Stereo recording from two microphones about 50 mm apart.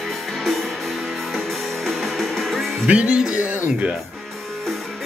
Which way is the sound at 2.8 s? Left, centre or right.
Right.